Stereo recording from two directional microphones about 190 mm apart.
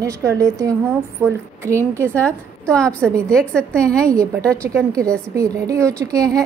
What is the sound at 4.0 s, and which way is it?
A woman's voice, 15° right (ahead or behind).